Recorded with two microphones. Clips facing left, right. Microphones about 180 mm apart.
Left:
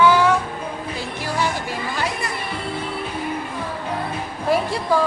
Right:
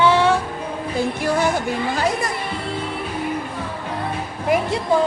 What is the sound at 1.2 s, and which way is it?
Music, 50° right (ahead or behind).